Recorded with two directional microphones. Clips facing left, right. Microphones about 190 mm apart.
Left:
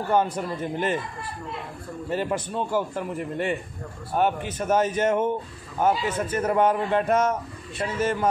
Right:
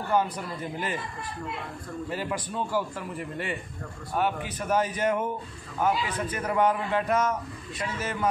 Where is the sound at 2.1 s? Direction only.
25° left (ahead or behind).